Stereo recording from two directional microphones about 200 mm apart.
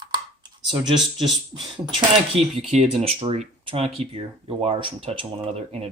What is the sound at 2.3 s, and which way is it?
Speech, 30° right (ahead or behind).